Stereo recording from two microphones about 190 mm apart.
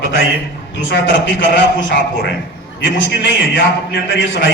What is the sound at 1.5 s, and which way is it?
A man's voice, 65° left (ahead or behind).